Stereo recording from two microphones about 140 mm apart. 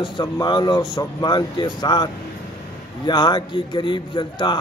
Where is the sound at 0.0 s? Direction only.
30° left (ahead or behind).